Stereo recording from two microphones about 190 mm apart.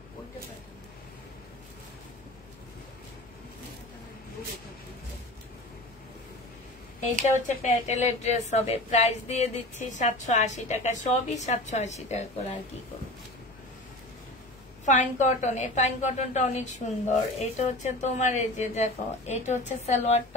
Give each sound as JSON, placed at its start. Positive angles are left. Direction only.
{"t": 7.4, "sound": "a woman's voice", "side_deg": 40}
{"t": 14.9, "sound": "a woman's voice", "side_deg": 40}